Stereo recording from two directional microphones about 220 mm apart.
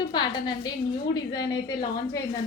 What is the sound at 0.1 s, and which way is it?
A woman's voice, 20° left (ahead or behind).